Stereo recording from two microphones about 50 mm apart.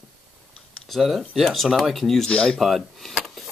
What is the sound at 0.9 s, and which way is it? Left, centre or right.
Speech, centre.